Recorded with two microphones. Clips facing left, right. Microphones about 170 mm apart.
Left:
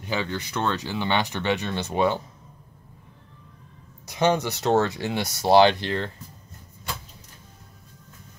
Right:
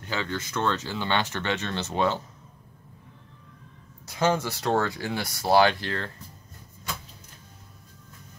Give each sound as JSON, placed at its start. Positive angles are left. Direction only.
{"t": 0.0, "sound": "speech", "side_deg": 15}
{"t": 4.0, "sound": "speech", "side_deg": 20}